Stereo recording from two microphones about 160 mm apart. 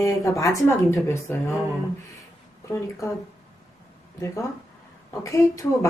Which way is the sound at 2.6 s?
20° left (ahead or behind).